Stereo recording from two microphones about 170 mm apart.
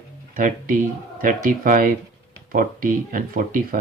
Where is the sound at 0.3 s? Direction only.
55° right (ahead or behind).